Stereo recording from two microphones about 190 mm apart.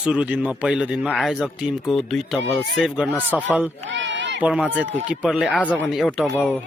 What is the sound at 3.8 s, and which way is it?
Run, 75° right (ahead or behind).